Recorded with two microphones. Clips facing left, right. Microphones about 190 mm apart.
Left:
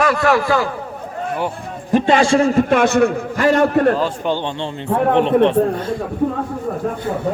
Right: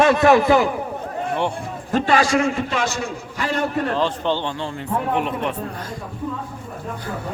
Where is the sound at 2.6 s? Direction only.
55° left (ahead or behind).